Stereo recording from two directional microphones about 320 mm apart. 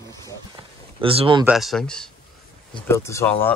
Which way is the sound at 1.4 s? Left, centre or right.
Centre.